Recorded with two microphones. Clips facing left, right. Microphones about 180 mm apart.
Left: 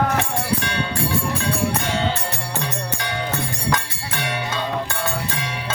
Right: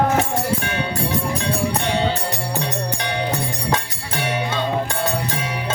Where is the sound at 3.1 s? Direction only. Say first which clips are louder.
Right 2 dB; 25° right (ahead or behind).